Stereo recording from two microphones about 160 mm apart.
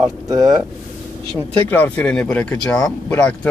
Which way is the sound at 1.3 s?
10° left (ahead or behind).